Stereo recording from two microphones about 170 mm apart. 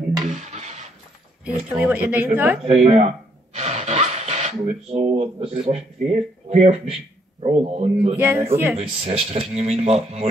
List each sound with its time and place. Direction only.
0.3 s a sound: 45° right (ahead or behind)
1.8 s a woman's voice: 10° right (ahead or behind)
2.6 s speech: 35° right (ahead or behind)
3.5 s a sound: 40° right (ahead or behind)
4.8 s speech: 40° right (ahead or behind)
8.2 s a woman's voice: 15° right (ahead or behind)
8.7 s speech: 35° right (ahead or behind)